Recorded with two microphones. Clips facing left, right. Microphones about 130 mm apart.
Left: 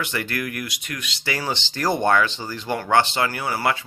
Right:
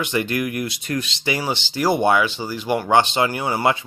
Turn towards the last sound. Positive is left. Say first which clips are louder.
# right 3 dB
turn(degrees=-20)  # may be behind; listen again after turning